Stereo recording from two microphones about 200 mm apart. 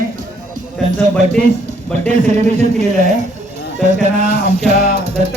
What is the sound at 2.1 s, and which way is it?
Speech, 35° right (ahead or behind).